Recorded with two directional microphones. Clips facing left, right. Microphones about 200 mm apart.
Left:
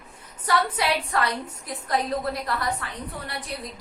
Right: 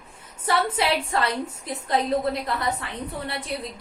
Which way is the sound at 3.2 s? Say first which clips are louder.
Right 3 dB; 25° right (ahead or behind).